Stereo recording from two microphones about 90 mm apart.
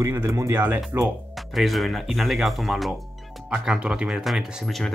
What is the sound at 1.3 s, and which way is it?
Speech, centre (ahead or behind).